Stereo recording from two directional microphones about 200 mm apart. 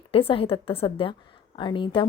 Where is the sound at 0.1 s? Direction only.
30° left (ahead or behind).